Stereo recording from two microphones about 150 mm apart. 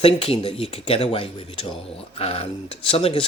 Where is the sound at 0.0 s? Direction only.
40° left (ahead or behind).